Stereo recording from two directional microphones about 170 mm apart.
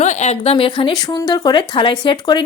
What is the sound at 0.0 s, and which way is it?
Speech, 40° left (ahead or behind).